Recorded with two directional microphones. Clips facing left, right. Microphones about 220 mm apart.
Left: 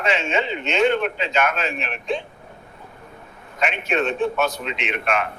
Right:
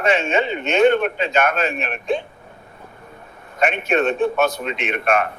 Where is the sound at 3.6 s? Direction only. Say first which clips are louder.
Right 4 dB; 55° right (ahead or behind).